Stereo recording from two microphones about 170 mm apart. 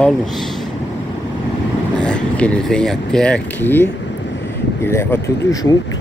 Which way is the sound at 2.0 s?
5° left (ahead or behind).